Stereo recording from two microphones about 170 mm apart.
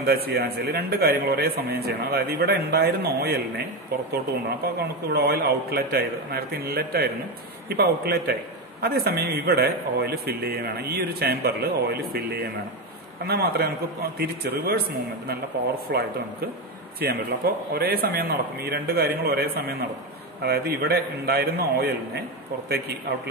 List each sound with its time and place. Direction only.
0.0 s a man's voice: 65° right (ahead or behind)
4.7 s a man's voice: 70° right (ahead or behind)